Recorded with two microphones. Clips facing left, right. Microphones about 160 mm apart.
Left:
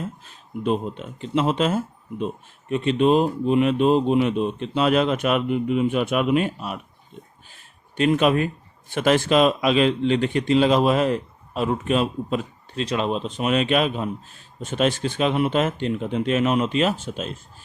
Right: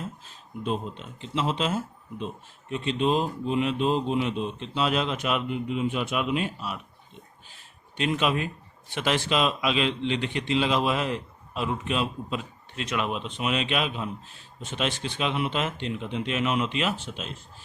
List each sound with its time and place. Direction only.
0.6 s speech: 60° left (ahead or behind)
7.9 s speech: 50° left (ahead or behind)
12.7 s speech: 30° left (ahead or behind)